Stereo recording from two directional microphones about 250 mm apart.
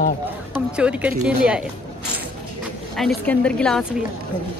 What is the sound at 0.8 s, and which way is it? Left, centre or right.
Speech, centre.